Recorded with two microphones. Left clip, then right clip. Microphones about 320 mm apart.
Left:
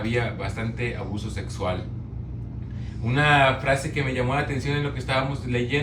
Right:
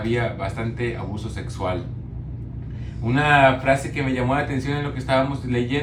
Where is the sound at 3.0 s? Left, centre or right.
Centre.